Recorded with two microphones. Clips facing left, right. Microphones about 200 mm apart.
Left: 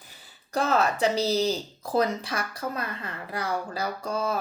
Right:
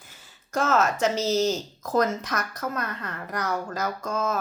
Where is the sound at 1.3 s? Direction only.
10° left (ahead or behind).